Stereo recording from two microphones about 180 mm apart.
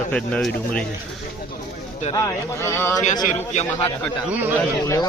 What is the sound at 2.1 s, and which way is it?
Speech, 15° left (ahead or behind).